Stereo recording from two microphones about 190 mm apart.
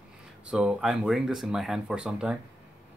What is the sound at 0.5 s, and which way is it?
Speech, 5° right (ahead or behind).